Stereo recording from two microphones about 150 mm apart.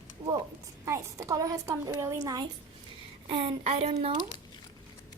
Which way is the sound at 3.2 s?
35° right (ahead or behind).